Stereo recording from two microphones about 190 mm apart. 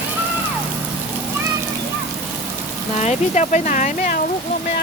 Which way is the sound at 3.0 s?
35° left (ahead or behind).